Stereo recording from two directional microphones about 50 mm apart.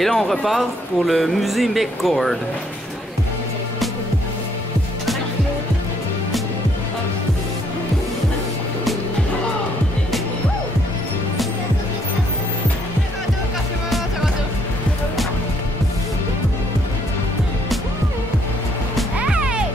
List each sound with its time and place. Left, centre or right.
0.0 s speech: centre
13.8 s music: centre
19.2 s music: centre